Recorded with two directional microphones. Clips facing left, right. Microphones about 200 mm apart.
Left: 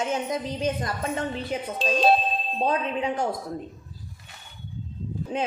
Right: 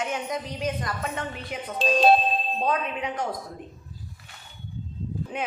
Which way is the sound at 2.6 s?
30° left (ahead or behind).